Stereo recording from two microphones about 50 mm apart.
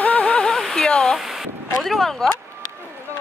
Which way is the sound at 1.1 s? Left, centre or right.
Centre.